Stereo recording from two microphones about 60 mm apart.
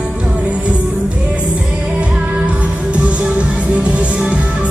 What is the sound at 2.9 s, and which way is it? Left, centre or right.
Music, centre.